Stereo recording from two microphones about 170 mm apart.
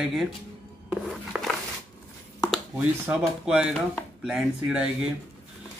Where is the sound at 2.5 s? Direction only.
5° right (ahead or behind).